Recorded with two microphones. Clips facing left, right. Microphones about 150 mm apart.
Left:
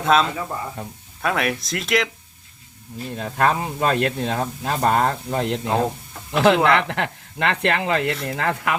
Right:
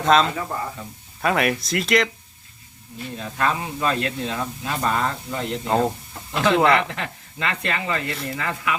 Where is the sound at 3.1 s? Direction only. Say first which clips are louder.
Left 4 dB; 50° left (ahead or behind).